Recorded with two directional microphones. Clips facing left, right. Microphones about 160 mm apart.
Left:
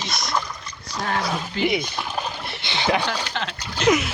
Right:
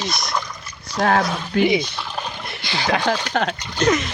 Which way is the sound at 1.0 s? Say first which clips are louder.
Right 6 dB; 75° right (ahead or behind).